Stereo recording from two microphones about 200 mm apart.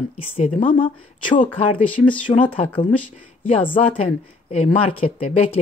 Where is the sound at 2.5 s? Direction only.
25° left (ahead or behind).